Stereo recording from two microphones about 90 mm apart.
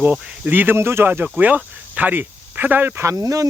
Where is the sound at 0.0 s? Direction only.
20° right (ahead or behind).